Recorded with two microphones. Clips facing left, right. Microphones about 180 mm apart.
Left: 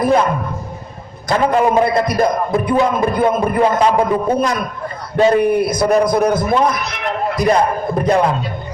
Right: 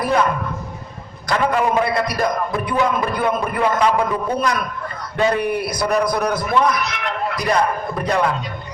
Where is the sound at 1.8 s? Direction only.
25° left (ahead or behind).